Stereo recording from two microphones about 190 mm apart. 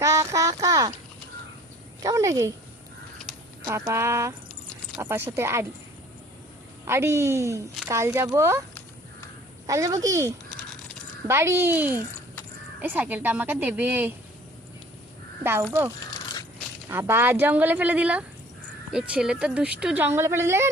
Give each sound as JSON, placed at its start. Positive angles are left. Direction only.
{"t": 0.0, "sound": "a sound", "side_deg": -15}
{"t": 2.0, "sound": "a woman's voice", "side_deg": -15}
{"t": 3.6, "sound": "a woman's voice", "side_deg": -15}
{"t": 6.8, "sound": "a woman's voice", "side_deg": -15}
{"t": 9.6, "sound": "a woman's voice", "side_deg": -15}
{"t": 16.9, "sound": "a woman's voice", "side_deg": -10}